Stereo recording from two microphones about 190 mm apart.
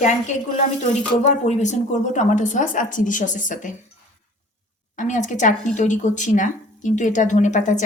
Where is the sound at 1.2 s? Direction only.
40° left (ahead or behind).